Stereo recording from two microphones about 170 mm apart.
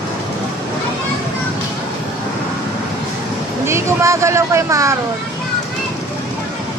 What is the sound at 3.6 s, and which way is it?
Speech, 15° right (ahead or behind).